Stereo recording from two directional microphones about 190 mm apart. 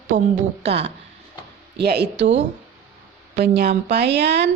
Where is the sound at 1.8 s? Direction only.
60° right (ahead or behind).